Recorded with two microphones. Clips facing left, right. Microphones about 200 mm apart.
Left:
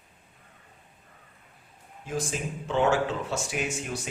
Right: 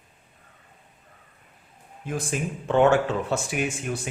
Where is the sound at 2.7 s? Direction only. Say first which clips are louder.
Right 5 dB; 55° right (ahead or behind).